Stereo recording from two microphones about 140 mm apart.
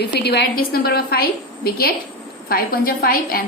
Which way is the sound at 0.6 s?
90° left.